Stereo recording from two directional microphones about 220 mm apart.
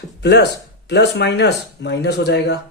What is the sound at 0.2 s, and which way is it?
Speech, 50° left (ahead or behind).